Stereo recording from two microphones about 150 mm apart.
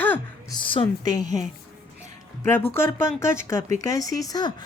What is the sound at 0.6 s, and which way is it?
Music, 35° left (ahead or behind).